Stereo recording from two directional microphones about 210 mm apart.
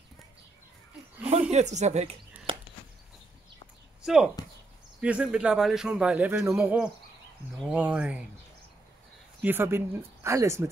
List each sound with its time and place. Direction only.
1.5 s speech: 35° right (ahead or behind)
2.5 s chopping: 25° right (ahead or behind)
4.0 s speech: 5° right (ahead or behind)
9.4 s speech: 10° right (ahead or behind)